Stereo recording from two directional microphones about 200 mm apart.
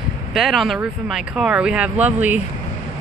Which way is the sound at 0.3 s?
Centre (ahead or behind).